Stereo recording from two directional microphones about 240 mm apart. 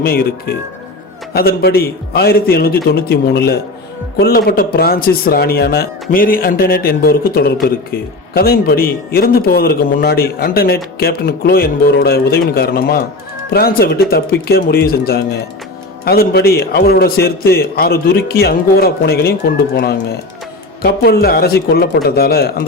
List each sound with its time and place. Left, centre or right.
0.0 s speech: left